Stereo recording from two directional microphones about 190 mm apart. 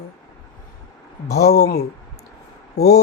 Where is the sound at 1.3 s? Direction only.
55° left (ahead or behind).